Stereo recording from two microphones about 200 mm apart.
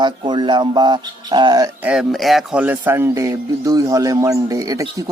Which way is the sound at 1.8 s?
5° right (ahead or behind).